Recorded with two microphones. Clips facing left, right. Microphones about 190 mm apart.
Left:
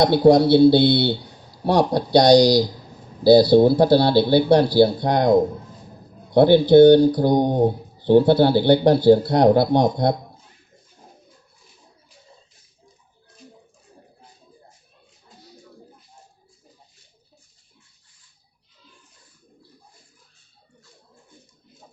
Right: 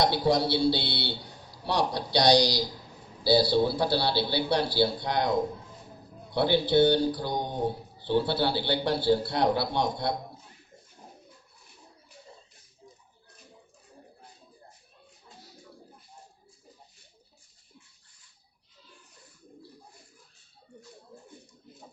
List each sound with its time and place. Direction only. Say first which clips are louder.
0.0 s speech: left 11 dB; 50° left (ahead or behind)